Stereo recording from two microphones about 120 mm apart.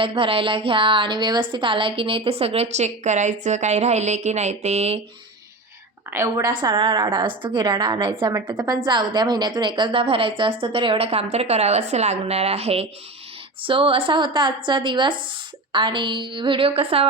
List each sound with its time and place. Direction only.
0.0 s a woman's voice: 45° right (ahead or behind); by 4.9 s 65° right (ahead or behind)
6.1 s a woman's voice: 25° right (ahead or behind); by 12.9 s 60° right (ahead or behind)
13.6 s a woman's voice: 45° right (ahead or behind)